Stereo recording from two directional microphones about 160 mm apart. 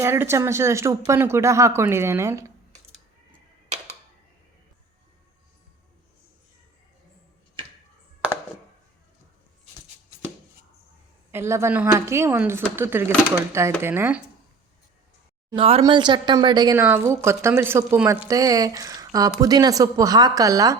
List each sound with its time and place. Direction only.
0.0 s a woman's voice: 15° right (ahead or behind)
11.3 s a woman's voice: 15° right (ahead or behind)
15.5 s a woman's voice: 35° right (ahead or behind)